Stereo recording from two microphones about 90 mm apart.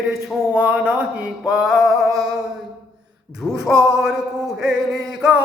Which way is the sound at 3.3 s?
5° right (ahead or behind).